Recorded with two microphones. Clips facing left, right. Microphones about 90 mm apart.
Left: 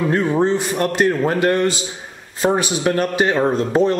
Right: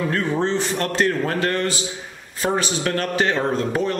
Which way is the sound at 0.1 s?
15° left (ahead or behind).